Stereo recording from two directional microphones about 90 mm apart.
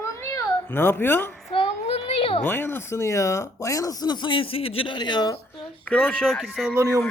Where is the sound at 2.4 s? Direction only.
25° left (ahead or behind); by 5.3 s 55° left (ahead or behind).